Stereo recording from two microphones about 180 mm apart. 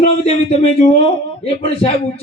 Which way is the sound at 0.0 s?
35° left (ahead or behind).